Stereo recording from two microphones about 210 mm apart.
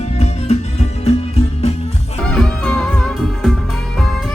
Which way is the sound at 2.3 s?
5° left (ahead or behind).